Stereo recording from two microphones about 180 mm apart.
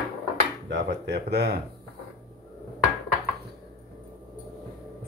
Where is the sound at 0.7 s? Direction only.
80° right; by 1.6 s 65° right (ahead or behind).